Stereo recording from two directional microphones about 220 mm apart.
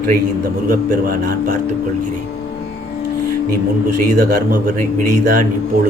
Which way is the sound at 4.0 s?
40° right (ahead or behind).